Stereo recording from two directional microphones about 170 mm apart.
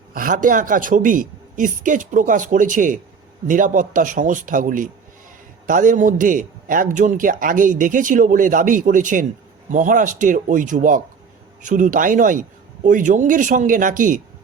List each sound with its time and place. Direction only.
0.1 s speech: 55° right (ahead or behind)